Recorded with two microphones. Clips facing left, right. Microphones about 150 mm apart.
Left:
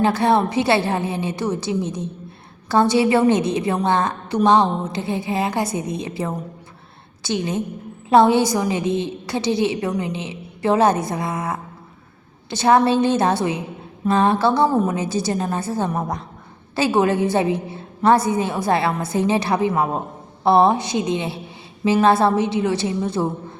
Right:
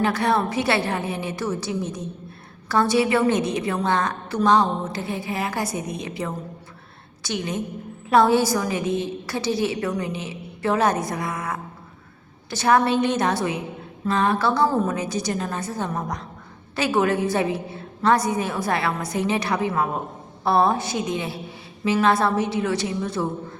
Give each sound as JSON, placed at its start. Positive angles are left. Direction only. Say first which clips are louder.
{"t": 0.0, "sound": "a woman's voice", "louder": "left 4 dB", "side_deg": 25}